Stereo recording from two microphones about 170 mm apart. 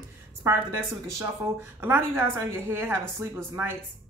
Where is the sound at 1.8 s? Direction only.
15° right (ahead or behind).